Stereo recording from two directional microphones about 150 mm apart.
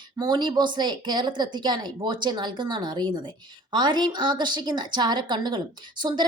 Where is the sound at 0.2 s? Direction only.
30° right (ahead or behind).